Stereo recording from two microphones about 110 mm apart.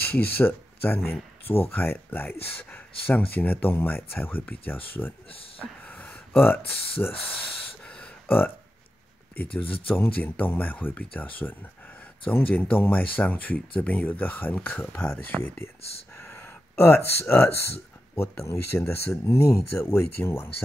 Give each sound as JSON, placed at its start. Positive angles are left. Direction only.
{"t": 0.1, "sound": "speech", "side_deg": 20}
{"t": 7.8, "sound": "a sound", "side_deg": 10}
{"t": 9.5, "sound": "speech", "side_deg": 15}